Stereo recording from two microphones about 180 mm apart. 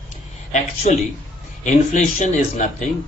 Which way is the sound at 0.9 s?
40° left (ahead or behind).